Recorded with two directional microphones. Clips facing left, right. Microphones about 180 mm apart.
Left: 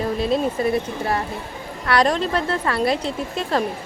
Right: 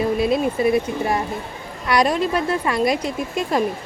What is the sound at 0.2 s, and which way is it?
A woman's voice, 10° right (ahead or behind).